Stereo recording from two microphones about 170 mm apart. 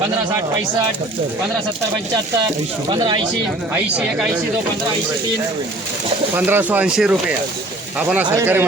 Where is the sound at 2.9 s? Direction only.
25° right (ahead or behind).